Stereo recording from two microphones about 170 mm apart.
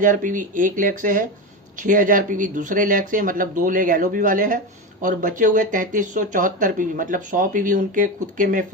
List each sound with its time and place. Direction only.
0.0 s speech: 50° right (ahead or behind)